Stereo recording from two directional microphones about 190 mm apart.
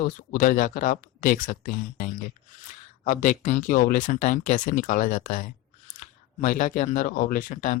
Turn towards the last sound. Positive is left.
turn(degrees=45)  # may be behind; listen again after turning